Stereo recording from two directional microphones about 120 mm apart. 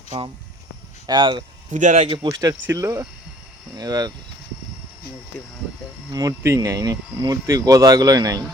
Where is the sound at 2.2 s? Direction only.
30° right (ahead or behind).